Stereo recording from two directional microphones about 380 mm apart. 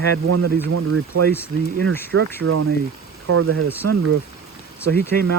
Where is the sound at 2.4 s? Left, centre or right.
Right.